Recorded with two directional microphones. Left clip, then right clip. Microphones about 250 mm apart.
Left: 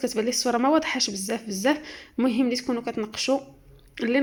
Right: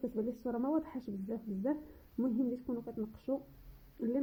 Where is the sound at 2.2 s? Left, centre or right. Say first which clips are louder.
Left 12 dB; left.